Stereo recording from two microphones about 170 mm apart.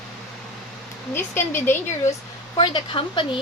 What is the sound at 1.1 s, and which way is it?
Speech, 15° left (ahead or behind).